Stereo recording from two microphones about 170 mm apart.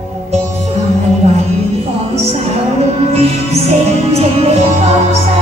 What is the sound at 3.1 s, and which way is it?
Music, 40° right (ahead or behind).